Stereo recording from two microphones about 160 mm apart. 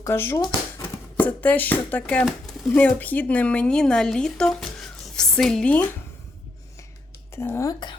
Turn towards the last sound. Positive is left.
turn(degrees=20)  # may be behind; listen again after turning